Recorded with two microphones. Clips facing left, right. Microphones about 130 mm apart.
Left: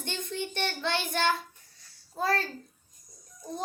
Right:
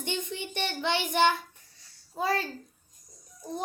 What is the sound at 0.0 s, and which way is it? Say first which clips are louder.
Child singing: right 1 dB; 15° right (ahead or behind).